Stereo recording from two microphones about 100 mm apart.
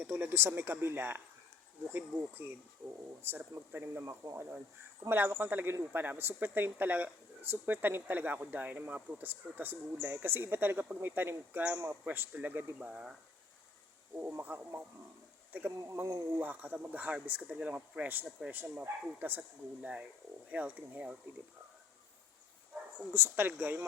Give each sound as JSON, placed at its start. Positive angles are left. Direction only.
{"t": 0.1, "sound": "speech", "side_deg": -20}
{"t": 12.9, "sound": "speech", "side_deg": -5}
{"t": 14.4, "sound": "speech", "side_deg": -20}
{"t": 15.8, "sound": "speech", "side_deg": -30}
{"t": 16.4, "sound": "speech", "side_deg": -15}
{"t": 23.1, "sound": "speech", "side_deg": -20}